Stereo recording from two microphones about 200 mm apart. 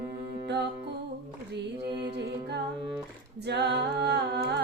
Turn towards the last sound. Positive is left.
turn(degrees=-55)  # may be behind; listen again after turning